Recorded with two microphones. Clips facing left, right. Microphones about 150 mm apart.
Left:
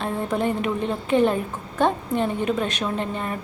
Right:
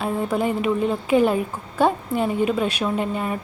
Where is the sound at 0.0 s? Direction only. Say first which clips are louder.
Right 2 dB; 5° right (ahead or behind).